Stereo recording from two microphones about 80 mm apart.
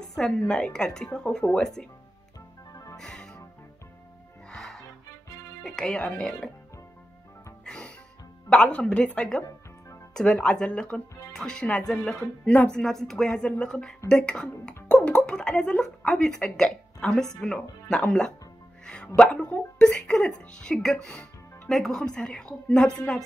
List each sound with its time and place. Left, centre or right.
0.0 s speech: centre
2.7 s music: left
3.0 s music: centre
4.5 s music: centre
5.6 s speech: centre
7.6 s music: centre
8.5 s speech: centre